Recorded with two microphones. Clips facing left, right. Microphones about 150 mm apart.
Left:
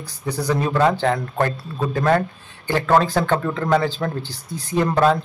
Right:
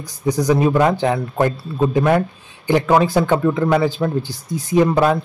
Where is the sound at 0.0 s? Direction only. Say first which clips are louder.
Right 6 dB; 10° right (ahead or behind).